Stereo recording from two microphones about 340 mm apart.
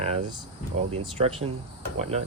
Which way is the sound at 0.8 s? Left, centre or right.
Centre.